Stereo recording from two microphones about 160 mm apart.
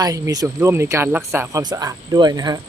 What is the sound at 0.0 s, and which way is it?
Speech, 20° right (ahead or behind).